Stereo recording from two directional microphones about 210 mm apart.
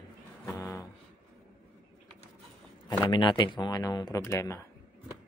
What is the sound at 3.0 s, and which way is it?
Speech, 20° left (ahead or behind).